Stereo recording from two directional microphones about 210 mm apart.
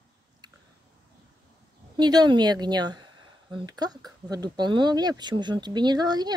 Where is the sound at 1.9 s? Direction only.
20° right (ahead or behind).